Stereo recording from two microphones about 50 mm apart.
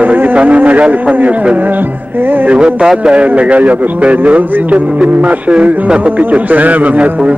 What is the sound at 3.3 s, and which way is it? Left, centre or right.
A man's voice, right.